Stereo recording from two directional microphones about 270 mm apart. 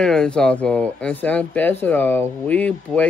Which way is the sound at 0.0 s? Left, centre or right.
Centre.